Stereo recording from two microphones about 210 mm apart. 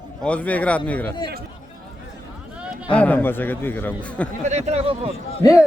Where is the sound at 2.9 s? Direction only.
5° left (ahead or behind).